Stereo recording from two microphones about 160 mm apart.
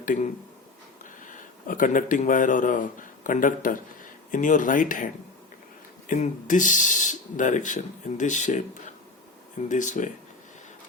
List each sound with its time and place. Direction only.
0.0 s speech: 55° left (ahead or behind)
1.3 s speech: 55° left (ahead or behind)
6.1 s speech: 55° left (ahead or behind)